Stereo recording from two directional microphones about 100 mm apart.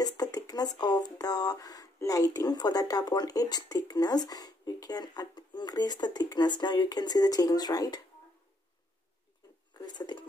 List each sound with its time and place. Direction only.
0.0 s speech: 40° left (ahead or behind)